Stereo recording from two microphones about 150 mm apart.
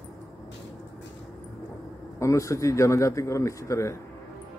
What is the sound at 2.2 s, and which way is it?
Speech, 20° left (ahead or behind).